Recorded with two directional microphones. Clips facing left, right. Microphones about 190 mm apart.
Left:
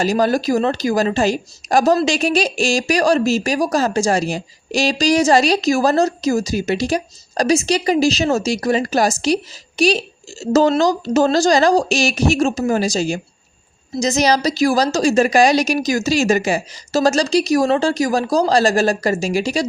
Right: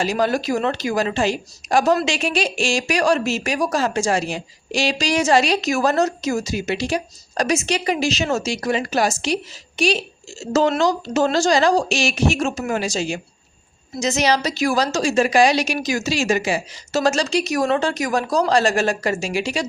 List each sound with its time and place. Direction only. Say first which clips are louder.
0.0 s a woman's voice: left 4 dB; 40° left (ahead or behind)